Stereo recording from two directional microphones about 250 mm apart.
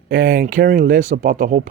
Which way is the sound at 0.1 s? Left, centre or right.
Right.